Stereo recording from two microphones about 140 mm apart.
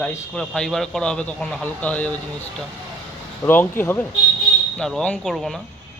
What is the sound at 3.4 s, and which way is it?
A man's voice, 20° left (ahead or behind).